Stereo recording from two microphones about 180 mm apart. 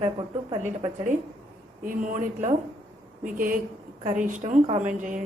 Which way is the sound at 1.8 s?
45° right (ahead or behind).